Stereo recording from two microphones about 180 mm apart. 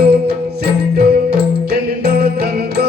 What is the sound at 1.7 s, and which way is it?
Music, 60° right (ahead or behind).